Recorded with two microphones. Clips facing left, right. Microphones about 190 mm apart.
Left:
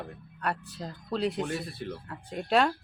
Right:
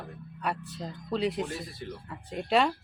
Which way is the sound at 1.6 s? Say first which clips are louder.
Left 3 dB; 65° left (ahead or behind).